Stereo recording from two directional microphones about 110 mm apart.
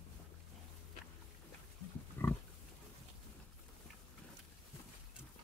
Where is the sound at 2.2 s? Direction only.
20° left (ahead or behind).